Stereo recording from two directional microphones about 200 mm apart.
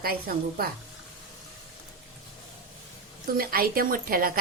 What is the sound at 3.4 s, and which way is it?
A woman's voice, 50° right (ahead or behind).